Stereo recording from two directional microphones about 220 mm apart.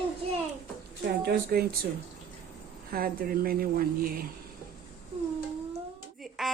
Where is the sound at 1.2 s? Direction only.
45° right (ahead or behind).